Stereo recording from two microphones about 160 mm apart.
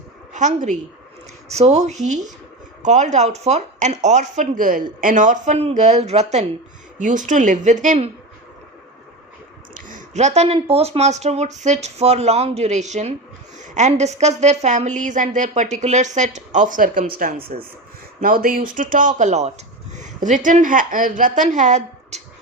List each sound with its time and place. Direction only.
0.3 s a woman's voice: 50° right (ahead or behind)
7.0 s a woman's voice: 55° right (ahead or behind)
9.7 s a woman's voice: 50° right (ahead or behind)